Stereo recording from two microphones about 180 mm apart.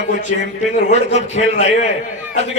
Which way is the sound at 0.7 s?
40° left (ahead or behind).